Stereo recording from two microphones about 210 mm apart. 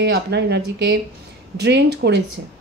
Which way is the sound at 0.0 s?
55° right (ahead or behind).